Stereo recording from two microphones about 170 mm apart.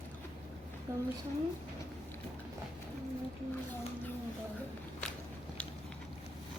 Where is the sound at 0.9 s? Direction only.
15° right (ahead or behind).